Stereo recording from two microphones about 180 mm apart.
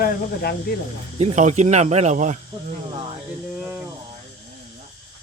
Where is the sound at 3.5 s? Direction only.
5° right (ahead or behind).